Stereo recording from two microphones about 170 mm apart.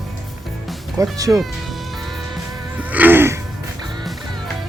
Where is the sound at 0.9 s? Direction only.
20° right (ahead or behind).